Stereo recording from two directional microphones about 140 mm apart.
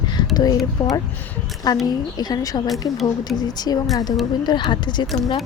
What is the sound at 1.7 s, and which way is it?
A woman's voice, 30° left (ahead or behind).